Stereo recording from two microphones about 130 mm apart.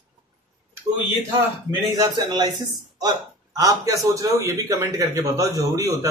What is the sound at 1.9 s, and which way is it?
A man's voice, 30° right (ahead or behind).